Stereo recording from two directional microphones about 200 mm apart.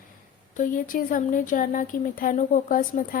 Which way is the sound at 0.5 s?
45° left (ahead or behind).